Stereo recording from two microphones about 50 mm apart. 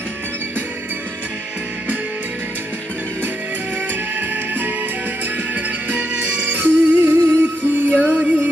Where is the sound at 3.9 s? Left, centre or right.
Right.